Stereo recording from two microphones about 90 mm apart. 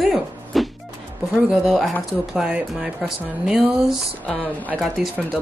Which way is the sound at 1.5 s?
5° right (ahead or behind).